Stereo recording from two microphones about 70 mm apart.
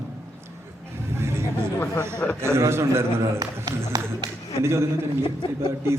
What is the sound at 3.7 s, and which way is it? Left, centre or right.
Speech, right.